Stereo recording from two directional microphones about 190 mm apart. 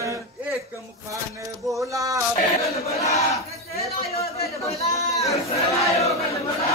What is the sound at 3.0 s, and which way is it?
Battle cry, 15° left (ahead or behind).